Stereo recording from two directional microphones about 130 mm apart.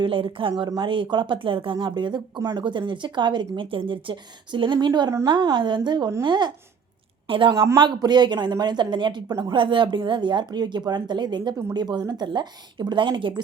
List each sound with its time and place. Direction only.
0.0 s a woman's voice: 40° right (ahead or behind)